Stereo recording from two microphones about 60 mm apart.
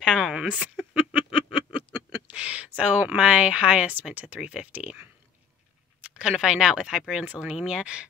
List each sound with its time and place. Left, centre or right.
0.0 s a sound: centre
3.2 s speech: centre
6.0 s speech: centre